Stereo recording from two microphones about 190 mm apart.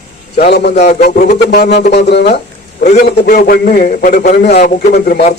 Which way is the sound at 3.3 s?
50° left (ahead or behind).